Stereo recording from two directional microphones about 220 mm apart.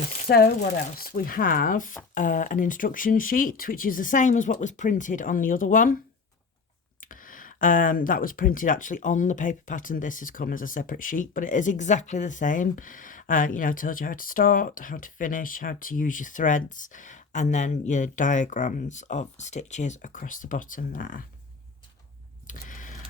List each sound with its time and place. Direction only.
0.3 s speech: 45° left (ahead or behind)
7.0 s speech: 40° left (ahead or behind)
22.4 s a sound: 35° left (ahead or behind)